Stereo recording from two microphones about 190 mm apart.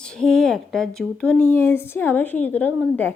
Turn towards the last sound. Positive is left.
turn(degrees=10)  # may be behind; listen again after turning